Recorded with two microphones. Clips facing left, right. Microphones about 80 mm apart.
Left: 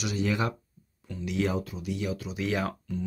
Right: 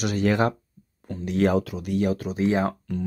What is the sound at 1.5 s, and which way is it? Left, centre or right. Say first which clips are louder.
Speech: right 8 dB; right.